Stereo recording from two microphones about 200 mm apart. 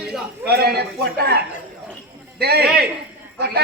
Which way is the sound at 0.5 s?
50° right (ahead or behind).